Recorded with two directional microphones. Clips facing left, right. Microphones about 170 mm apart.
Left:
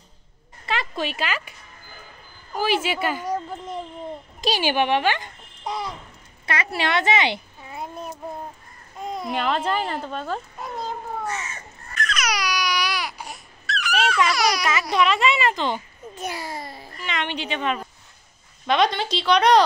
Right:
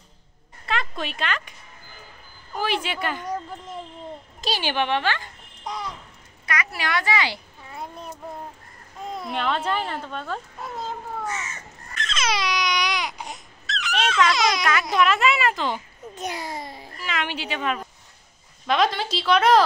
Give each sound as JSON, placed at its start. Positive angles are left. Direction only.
{"t": 0.7, "sound": "a sound", "side_deg": 0}
{"t": 2.5, "sound": "speech", "side_deg": 5}
{"t": 4.4, "sound": "a child's voice", "side_deg": 10}
{"t": 5.7, "sound": "a sound", "side_deg": 10}
{"t": 6.4, "sound": "a woman's voice", "side_deg": 30}
{"t": 7.6, "sound": "child singing", "side_deg": 5}
{"t": 9.2, "sound": "speech", "side_deg": 5}
{"t": 11.9, "sound": "baby cry", "side_deg": -25}
{"t": 14.3, "sound": "speech", "side_deg": -20}
{"t": 14.6, "sound": "speech", "side_deg": 0}
{"t": 16.2, "sound": "a child's voice", "side_deg": -20}
{"t": 17.0, "sound": "speech", "side_deg": -5}